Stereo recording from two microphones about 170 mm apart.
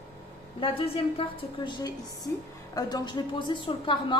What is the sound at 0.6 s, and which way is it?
A woman's voice, 30° left (ahead or behind).